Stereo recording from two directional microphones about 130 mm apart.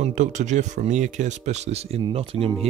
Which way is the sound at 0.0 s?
70° right (ahead or behind).